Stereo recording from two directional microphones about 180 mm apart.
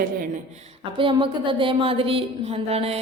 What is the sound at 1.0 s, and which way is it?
A woman's voice, 30° right (ahead or behind).